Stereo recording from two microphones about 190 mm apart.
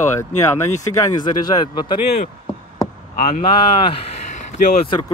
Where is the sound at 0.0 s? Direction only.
15° left (ahead or behind).